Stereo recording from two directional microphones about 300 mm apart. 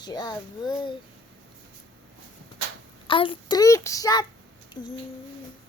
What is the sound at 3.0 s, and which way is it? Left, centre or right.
A child's voice, centre.